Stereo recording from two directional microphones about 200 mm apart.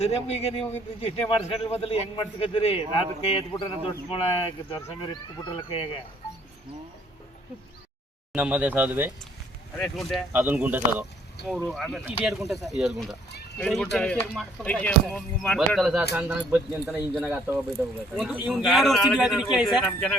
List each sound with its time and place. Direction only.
0.0 s a man's voice: 30° left (ahead or behind)
8.3 s speech: 5° right (ahead or behind)
9.7 s speech: centre (ahead or behind)